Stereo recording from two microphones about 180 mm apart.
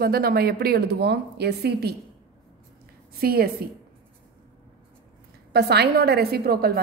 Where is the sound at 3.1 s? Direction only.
60° right (ahead or behind).